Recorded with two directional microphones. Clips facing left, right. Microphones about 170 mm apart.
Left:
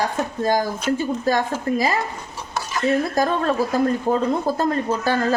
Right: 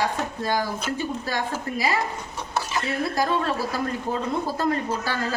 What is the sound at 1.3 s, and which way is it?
Speech, 45° left (ahead or behind).